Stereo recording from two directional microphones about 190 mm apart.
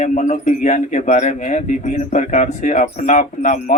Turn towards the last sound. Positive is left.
turn(degrees=40)  # may be behind; listen again after turning